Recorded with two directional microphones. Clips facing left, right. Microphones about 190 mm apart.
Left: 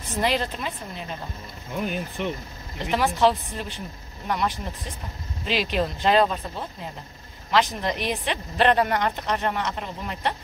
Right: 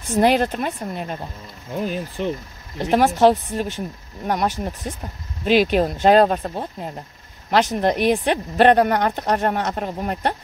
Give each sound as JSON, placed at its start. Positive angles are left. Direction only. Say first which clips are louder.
{"t": 0.1, "sound": "speech", "louder": "right 8 dB", "side_deg": -50}
{"t": 1.8, "sound": "speech", "louder": "right 3 dB", "side_deg": -35}
{"t": 2.8, "sound": "speech", "louder": "right 6 dB", "side_deg": -45}